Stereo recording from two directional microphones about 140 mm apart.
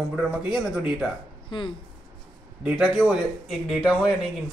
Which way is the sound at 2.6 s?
5° right (ahead or behind).